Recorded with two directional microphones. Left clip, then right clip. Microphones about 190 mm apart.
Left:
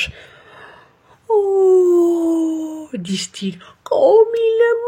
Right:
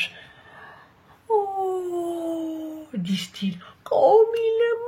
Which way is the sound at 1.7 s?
50° left (ahead or behind).